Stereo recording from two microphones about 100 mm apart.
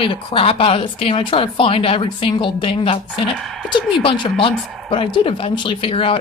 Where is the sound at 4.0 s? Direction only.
60° left (ahead or behind).